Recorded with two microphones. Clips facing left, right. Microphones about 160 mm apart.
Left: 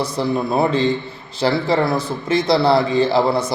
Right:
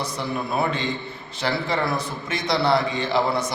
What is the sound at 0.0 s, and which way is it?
A man's voice, 30° left (ahead or behind).